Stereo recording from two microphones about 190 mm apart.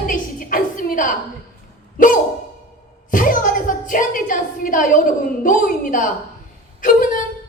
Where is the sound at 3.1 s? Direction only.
45° left (ahead or behind).